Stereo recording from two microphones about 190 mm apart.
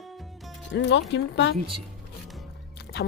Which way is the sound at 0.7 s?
65° left (ahead or behind).